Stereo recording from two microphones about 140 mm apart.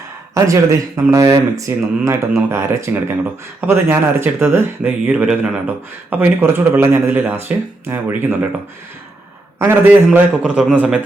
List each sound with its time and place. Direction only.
0.3 s speech: 20° right (ahead or behind)
9.6 s speech: 15° right (ahead or behind)